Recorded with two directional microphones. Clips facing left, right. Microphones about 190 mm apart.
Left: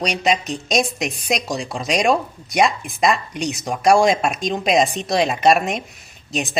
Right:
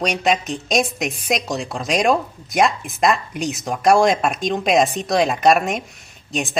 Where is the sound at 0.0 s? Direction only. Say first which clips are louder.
Right 1 dB; centre (ahead or behind).